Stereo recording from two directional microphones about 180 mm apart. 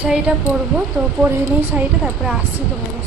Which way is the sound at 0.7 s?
10° right (ahead or behind).